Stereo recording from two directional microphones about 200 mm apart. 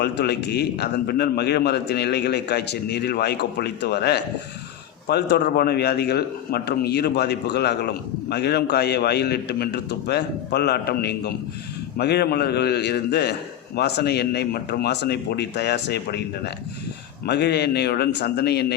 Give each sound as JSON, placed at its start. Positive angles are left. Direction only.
{"t": 0.0, "sound": "a man's voice", "side_deg": 55}